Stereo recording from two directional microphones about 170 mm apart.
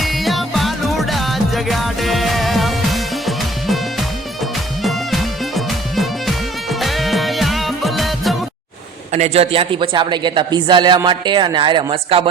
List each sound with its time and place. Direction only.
0.0 s music: centre (ahead or behind)
4.8 s music: centre (ahead or behind)
9.1 s a man's voice: 40° right (ahead or behind)